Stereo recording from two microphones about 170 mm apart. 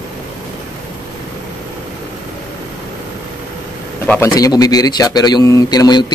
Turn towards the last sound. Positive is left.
turn(degrees=25)  # may be behind; listen again after turning